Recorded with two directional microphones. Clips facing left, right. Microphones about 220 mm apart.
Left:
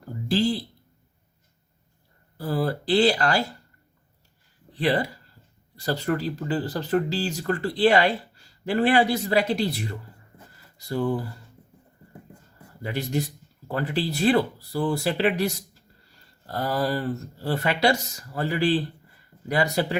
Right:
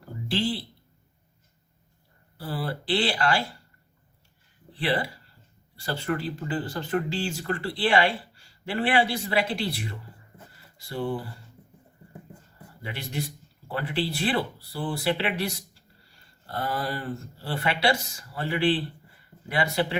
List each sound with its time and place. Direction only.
0.3 s speech: 40° left (ahead or behind)
2.4 s speech: 45° left (ahead or behind)
4.8 s speech: 40° left (ahead or behind)
12.8 s speech: 45° left (ahead or behind)